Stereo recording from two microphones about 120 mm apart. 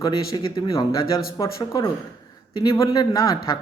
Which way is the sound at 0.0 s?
35° left (ahead or behind).